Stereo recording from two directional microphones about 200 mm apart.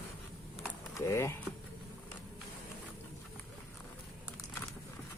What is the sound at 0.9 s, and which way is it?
Speech, 15° left (ahead or behind).